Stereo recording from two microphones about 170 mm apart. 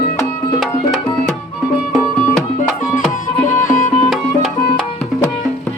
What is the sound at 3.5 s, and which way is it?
Music, 50° left (ahead or behind).